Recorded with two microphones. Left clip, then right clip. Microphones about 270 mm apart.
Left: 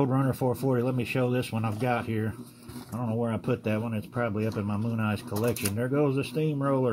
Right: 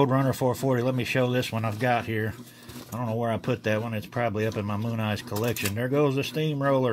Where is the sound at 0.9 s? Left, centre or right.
Right.